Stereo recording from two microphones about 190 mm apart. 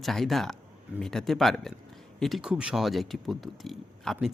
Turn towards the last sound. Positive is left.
turn(degrees=0)  # may be behind; listen again after turning